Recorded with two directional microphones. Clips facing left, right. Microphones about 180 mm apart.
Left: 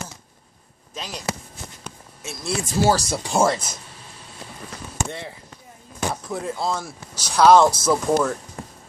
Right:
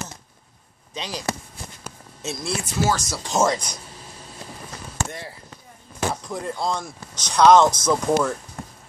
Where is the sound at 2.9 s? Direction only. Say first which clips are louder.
Left 5 dB; 35° left (ahead or behind).